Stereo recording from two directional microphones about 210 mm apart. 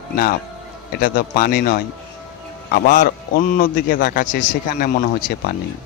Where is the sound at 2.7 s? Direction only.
45° left (ahead or behind).